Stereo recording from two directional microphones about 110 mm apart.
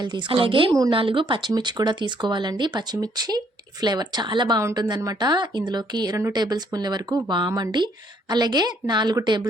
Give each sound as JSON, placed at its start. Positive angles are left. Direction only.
{"t": 0.0, "sound": "a woman's voice", "side_deg": -45}